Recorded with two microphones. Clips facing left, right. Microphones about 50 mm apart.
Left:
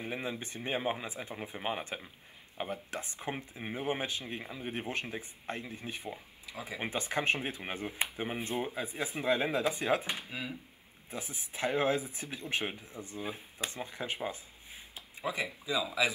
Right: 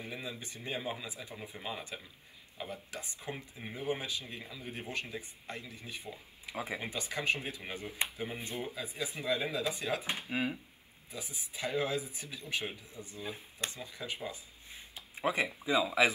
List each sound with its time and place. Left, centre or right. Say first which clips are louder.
0.0 s speech: left 5 dB; left
6.4 s speech: right 4 dB; right
6.8 s speech: left 4 dB; left
10.3 s speech: right 6 dB; right
11.1 s speech: left 3 dB; left
15.1 s speech: right 3 dB; right